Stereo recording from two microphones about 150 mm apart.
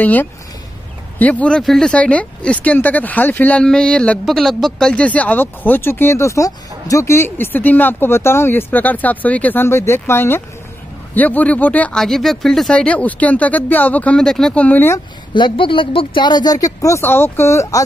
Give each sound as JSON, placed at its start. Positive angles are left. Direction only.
{"t": 0.0, "sound": "speech", "side_deg": 10}
{"t": 15.3, "sound": "speech", "side_deg": 35}